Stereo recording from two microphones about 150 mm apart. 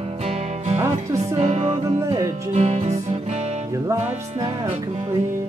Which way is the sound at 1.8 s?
20° right (ahead or behind).